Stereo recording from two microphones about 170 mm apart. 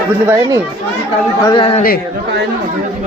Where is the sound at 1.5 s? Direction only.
30° left (ahead or behind).